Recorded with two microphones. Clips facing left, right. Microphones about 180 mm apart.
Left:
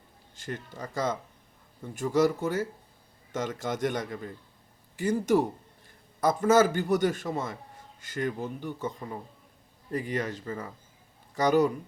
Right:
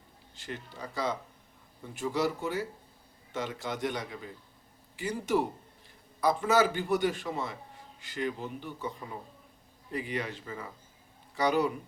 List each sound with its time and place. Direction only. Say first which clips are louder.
0.3 s a man's voice: left 4 dB; 45° left (ahead or behind)
9.9 s a man's voice: left 4 dB; 45° left (ahead or behind)